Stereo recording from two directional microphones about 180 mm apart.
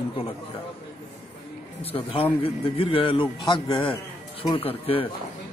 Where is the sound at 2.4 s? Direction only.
30° left (ahead or behind).